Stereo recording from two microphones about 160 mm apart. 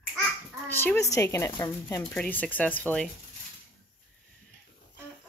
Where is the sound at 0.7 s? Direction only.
15° left (ahead or behind).